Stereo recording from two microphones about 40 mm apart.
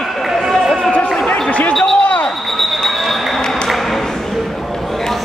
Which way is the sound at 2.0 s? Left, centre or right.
Left.